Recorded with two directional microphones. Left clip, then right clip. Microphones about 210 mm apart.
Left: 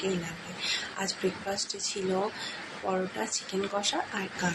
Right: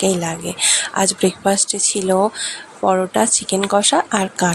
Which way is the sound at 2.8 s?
50° right (ahead or behind).